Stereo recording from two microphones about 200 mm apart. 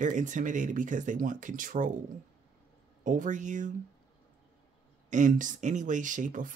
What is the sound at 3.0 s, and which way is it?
Speech, 40° right (ahead or behind).